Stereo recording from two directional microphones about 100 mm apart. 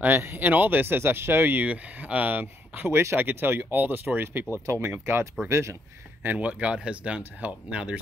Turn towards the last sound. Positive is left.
turn(degrees=-10)  # may be behind; listen again after turning